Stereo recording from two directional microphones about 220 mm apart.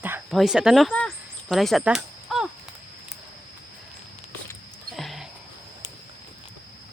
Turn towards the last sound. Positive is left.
turn(degrees=0)  # may be behind; listen again after turning